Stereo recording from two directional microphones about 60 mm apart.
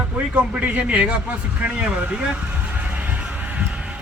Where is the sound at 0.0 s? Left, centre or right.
Right.